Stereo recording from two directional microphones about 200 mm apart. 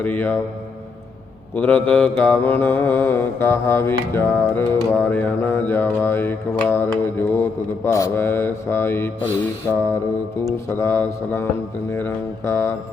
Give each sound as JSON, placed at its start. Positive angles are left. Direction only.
{"t": 0.0, "sound": "music", "side_deg": 10}
{"t": 1.5, "sound": "music", "side_deg": 5}
{"t": 10.7, "sound": "music", "side_deg": 10}